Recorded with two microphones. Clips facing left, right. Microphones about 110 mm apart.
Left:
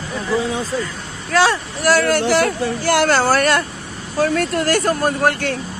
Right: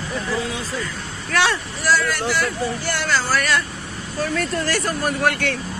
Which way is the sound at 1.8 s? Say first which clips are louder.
Left 6 dB; 60° left (ahead or behind).